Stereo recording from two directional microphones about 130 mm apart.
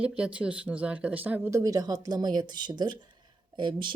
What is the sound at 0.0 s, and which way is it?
Speech, 10° right (ahead or behind).